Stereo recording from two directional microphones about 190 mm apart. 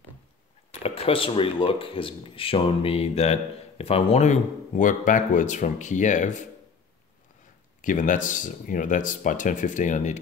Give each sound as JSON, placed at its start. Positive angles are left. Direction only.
{"t": 0.7, "sound": "speech", "side_deg": 30}
{"t": 7.8, "sound": "speech", "side_deg": 45}